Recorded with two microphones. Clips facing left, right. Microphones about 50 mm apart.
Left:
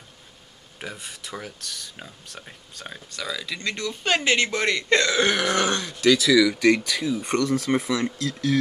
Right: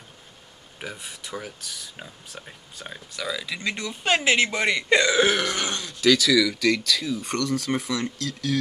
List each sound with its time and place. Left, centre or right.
0.7 s speech: centre
5.5 s speech: left
6.1 s speech: centre
6.6 s speech: left